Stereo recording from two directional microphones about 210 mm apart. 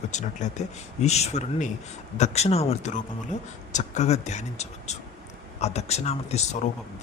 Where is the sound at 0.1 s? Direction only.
35° left (ahead or behind).